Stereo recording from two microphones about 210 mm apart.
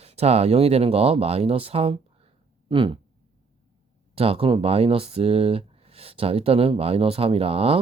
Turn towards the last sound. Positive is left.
turn(degrees=-25)  # may be behind; listen again after turning